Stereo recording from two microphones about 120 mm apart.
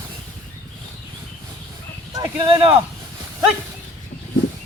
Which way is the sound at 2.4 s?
50° right (ahead or behind).